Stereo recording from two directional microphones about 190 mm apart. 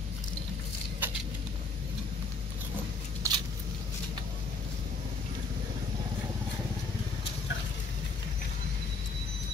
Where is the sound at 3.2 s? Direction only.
15° right (ahead or behind).